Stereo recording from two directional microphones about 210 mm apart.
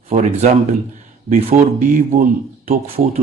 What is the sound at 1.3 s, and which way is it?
Speech, 45° right (ahead or behind).